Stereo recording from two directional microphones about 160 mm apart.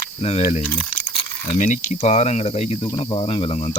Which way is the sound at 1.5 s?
50° left (ahead or behind).